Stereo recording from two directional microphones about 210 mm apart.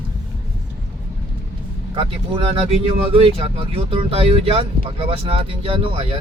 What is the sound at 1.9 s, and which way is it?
Speech, 25° right (ahead or behind).